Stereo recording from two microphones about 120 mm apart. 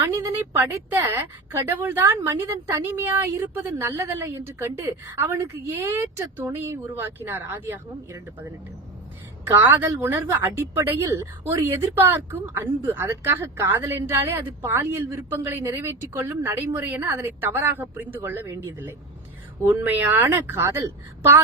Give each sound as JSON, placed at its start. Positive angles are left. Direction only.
{"t": 0.2, "sound": "a woman's voice", "side_deg": -15}
{"t": 9.5, "sound": "a woman's voice", "side_deg": -20}